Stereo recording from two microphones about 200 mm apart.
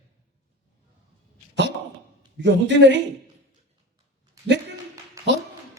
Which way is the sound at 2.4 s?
60° right (ahead or behind).